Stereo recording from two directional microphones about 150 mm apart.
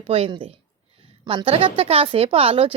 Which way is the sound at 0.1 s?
35° right (ahead or behind).